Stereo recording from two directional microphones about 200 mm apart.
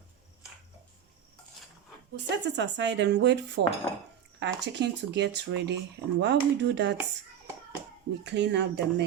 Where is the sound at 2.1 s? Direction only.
60° right (ahead or behind).